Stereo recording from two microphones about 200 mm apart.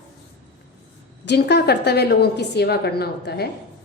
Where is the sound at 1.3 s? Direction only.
55° left (ahead or behind).